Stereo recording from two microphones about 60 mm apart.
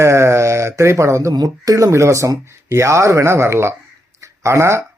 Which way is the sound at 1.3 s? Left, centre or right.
Right.